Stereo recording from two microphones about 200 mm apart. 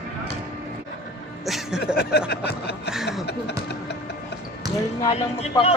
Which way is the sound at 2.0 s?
55° left (ahead or behind).